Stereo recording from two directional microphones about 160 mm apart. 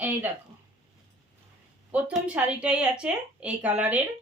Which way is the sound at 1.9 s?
10° right (ahead or behind).